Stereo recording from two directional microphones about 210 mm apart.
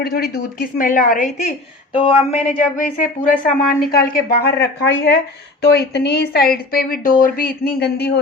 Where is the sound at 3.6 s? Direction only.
45° left (ahead or behind).